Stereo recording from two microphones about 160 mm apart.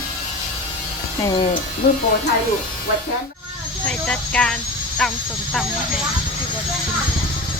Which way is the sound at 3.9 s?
5° left (ahead or behind).